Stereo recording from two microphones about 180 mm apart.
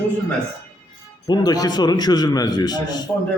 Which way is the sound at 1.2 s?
25° left (ahead or behind).